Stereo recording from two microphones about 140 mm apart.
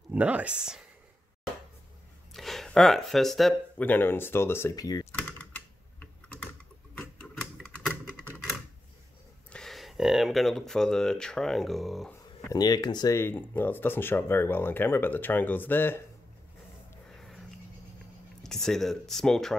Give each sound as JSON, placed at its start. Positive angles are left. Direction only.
{"t": 0.1, "sound": "speech", "side_deg": -10}
{"t": 2.3, "sound": "speech", "side_deg": 0}
{"t": 3.8, "sound": "speech", "side_deg": 15}
{"t": 5.4, "sound": "typing", "side_deg": 10}
{"t": 7.5, "sound": "typewriter", "side_deg": 5}
{"t": 9.5, "sound": "speech", "side_deg": 5}
{"t": 12.4, "sound": "speech", "side_deg": 30}
{"t": 13.2, "sound": "speech", "side_deg": 15}
{"t": 17.1, "sound": "a sound", "side_deg": 0}
{"t": 18.4, "sound": "speech", "side_deg": 5}